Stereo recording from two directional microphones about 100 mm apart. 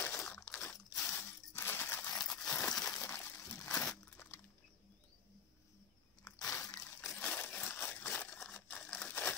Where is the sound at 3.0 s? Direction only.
20° left (ahead or behind).